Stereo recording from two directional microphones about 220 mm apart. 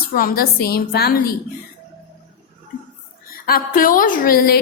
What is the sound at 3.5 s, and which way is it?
A woman's voice, 40° left (ahead or behind).